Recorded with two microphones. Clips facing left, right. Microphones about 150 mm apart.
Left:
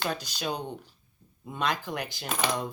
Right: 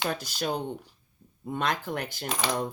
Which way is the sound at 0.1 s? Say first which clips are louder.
Right 2 dB; 50° right (ahead or behind).